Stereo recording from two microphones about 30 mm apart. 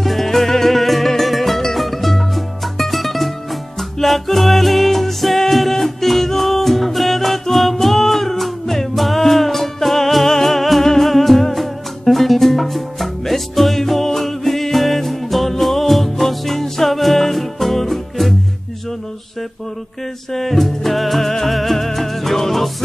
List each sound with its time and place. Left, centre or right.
0.0 s music: centre
20.3 s music: centre